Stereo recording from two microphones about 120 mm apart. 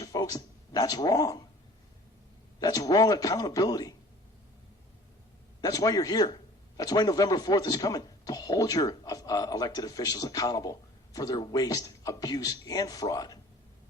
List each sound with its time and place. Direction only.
0.0 s speech: 30° left (ahead or behind)
2.6 s a man's voice: 30° left (ahead or behind)
5.6 s a man's voice: 30° left (ahead or behind)